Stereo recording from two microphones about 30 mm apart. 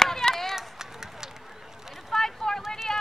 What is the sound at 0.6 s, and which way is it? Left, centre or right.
Run, centre.